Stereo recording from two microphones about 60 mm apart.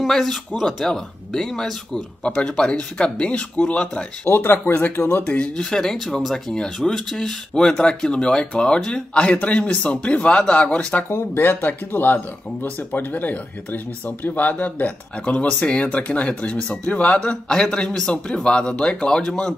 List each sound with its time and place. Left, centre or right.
0.0 s speech: centre
4.4 s speech: left
5.0 s speech: left
11.0 s speech: left; by 19.5 s centre